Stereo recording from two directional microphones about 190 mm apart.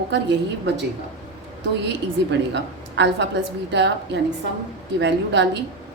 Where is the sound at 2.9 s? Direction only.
70° right (ahead or behind).